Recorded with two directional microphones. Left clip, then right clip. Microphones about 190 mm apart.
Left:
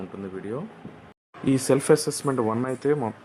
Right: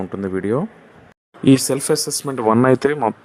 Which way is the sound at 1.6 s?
Centre (ahead or behind).